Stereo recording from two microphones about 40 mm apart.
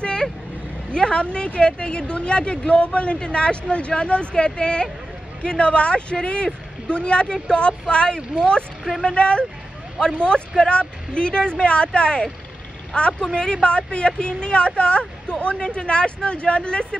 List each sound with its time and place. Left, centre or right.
0.0 s vehicle: left
0.9 s a woman's voice: left